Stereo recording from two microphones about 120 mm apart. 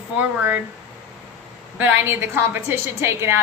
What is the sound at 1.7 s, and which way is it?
A woman's voice, 20° right (ahead or behind).